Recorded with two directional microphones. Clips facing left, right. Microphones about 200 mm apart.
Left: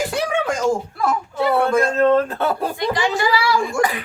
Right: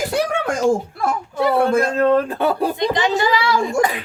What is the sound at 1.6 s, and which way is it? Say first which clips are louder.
Speech: left 1 dB; 10° right (ahead or behind).